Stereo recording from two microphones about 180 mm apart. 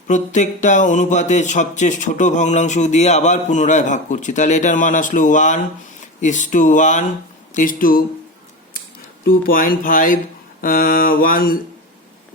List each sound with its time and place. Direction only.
0.1 s speech: 45° left (ahead or behind)
9.2 s speech: 55° left (ahead or behind)